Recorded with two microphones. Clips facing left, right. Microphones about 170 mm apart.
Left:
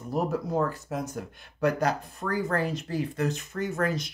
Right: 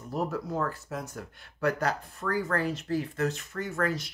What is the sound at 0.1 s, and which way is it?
Speech, 20° left (ahead or behind).